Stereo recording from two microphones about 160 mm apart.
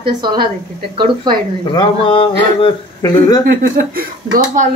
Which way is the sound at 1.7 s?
30° left (ahead or behind).